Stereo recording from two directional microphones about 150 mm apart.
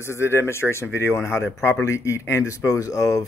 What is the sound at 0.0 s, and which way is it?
Speech, 15° left (ahead or behind).